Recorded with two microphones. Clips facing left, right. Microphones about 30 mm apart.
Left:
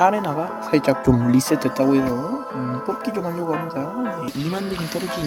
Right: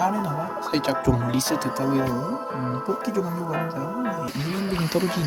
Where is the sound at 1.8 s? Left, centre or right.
Left.